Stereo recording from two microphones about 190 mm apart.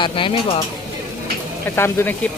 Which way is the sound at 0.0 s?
25° left (ahead or behind).